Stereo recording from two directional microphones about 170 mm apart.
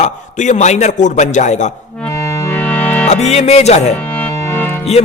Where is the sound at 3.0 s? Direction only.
40° left (ahead or behind).